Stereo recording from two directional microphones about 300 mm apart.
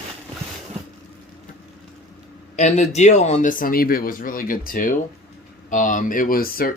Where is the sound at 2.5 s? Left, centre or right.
Left.